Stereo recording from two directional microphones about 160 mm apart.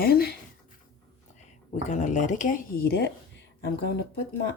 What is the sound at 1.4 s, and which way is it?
Speech, 45° left (ahead or behind).